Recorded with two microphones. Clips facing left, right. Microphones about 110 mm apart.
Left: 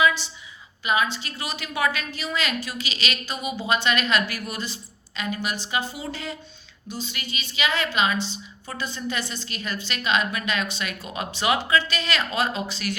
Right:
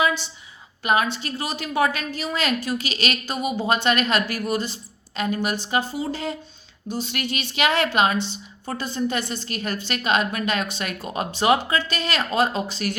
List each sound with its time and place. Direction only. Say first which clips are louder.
0.0 s a sound: left 1 dB; 50° right (ahead or behind)
0.8 s a woman's voice: right 3 dB; 50° right (ahead or behind)
1.4 s a woman's voice: right 4 dB; 40° right (ahead or behind)
6.8 s a woman's voice: right 6 dB; 55° right (ahead or behind)